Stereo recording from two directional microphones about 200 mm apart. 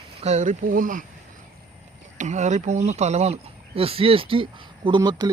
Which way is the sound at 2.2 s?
35° right (ahead or behind).